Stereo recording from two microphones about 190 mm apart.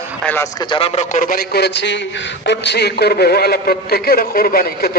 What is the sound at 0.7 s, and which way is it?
A man's voice, 30° left (ahead or behind).